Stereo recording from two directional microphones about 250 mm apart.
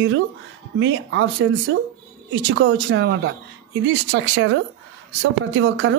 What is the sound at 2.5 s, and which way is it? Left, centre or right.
A man's voice, right.